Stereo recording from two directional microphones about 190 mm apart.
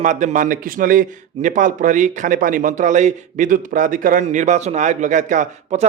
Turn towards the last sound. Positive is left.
turn(degrees=-40)  # may be behind; listen again after turning